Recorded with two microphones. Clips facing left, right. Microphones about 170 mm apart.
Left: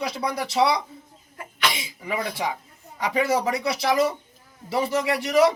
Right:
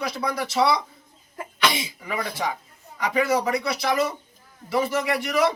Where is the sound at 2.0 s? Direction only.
20° left (ahead or behind).